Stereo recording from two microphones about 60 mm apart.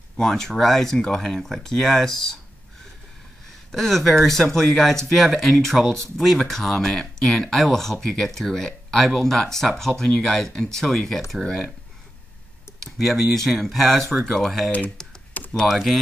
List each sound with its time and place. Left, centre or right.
0.2 s speech: centre
3.7 s speech: centre
12.9 s speech: centre
15.3 s a sound: left
15.7 s speech: centre